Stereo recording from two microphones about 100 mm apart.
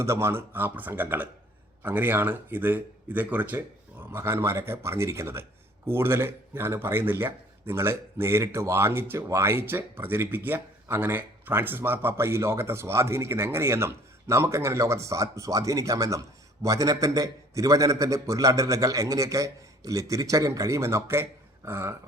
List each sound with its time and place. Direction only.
0.0 s a man's voice: 25° right (ahead or behind)